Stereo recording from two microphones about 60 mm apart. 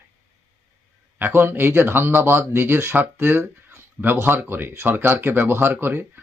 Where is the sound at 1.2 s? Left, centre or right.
Right.